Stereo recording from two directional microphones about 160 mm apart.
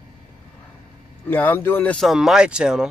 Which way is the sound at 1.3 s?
10° left (ahead or behind).